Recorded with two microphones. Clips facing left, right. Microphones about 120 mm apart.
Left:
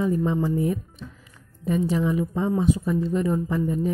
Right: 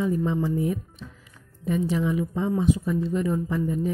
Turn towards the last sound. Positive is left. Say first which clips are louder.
# left 2 dB
turn(degrees=40)  # may be behind; listen again after turning